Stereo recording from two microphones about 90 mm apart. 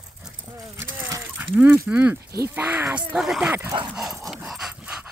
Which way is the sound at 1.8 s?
15° right (ahead or behind).